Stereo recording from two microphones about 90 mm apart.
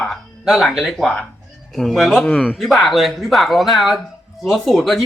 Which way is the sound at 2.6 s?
Centre (ahead or behind).